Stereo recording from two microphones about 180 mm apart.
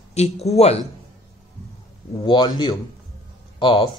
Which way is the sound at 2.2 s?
25° left (ahead or behind).